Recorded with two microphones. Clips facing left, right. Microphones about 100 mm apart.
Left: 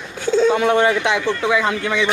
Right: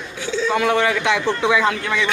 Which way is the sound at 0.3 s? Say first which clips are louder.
Left 7 dB; 50° left (ahead or behind).